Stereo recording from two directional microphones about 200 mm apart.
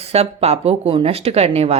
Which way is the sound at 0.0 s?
30° right (ahead or behind).